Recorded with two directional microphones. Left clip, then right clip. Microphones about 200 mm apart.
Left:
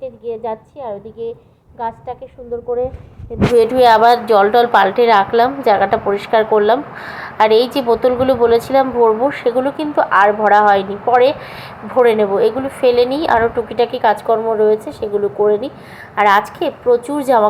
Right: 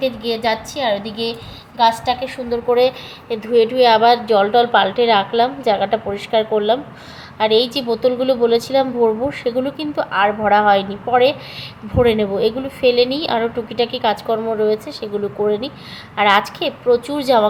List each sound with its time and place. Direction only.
0.0 s a woman's voice: 10° left (ahead or behind)
3.6 s a woman's voice: 5° left (ahead or behind)